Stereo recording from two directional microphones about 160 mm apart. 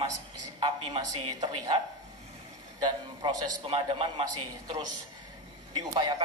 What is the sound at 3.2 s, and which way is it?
A man's voice, 30° right (ahead or behind).